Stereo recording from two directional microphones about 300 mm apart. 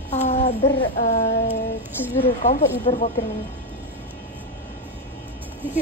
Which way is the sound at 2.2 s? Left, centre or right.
Left.